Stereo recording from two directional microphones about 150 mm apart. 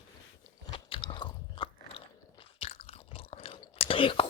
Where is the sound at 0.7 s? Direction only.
35° left (ahead or behind).